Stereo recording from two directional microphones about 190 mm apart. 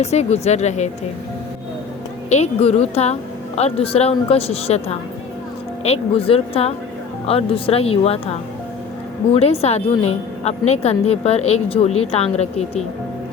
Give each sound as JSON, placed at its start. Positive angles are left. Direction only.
{"t": 0.0, "sound": "a woman's voice", "side_deg": 35}
{"t": 2.3, "sound": "a woman's voice", "side_deg": 35}
{"t": 5.8, "sound": "a woman's voice", "side_deg": 30}